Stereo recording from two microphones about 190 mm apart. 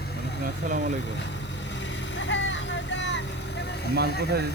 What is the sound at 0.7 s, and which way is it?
Speech, 45° right (ahead or behind).